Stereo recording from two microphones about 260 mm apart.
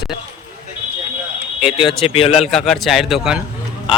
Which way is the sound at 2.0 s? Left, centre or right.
Left.